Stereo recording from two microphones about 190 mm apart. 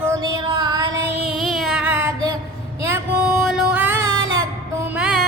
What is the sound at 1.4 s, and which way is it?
Child singing, centre (ahead or behind).